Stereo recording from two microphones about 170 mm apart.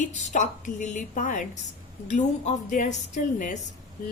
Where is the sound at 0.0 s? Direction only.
45° left (ahead or behind).